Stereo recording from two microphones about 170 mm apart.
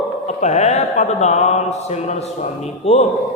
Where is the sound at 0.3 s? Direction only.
40° left (ahead or behind).